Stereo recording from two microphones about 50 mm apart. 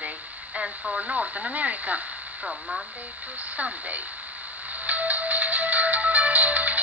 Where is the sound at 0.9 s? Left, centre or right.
Right.